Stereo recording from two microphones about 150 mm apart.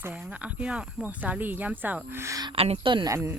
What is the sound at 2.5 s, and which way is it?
Speech, 40° right (ahead or behind).